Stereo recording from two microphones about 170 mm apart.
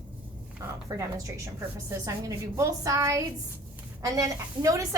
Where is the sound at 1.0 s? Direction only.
20° right (ahead or behind).